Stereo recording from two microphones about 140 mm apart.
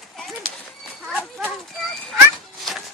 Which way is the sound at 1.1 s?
Centre (ahead or behind).